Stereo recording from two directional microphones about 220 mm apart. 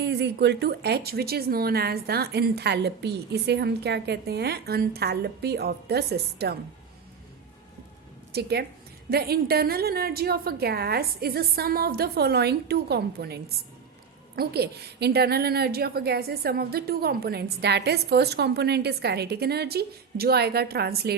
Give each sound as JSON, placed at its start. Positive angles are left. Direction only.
{"t": 0.0, "sound": "a woman's voice", "side_deg": -50}
{"t": 8.3, "sound": "a woman's voice", "side_deg": -45}